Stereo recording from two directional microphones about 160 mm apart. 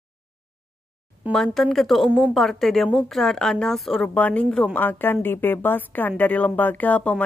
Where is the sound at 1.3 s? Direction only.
Centre (ahead or behind).